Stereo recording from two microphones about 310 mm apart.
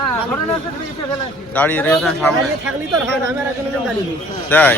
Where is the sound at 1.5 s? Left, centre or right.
Centre.